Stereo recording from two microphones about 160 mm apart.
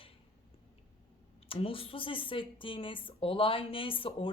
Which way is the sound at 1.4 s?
35° left (ahead or behind).